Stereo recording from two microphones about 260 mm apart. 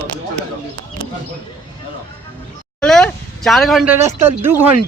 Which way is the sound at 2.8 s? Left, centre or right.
Centre.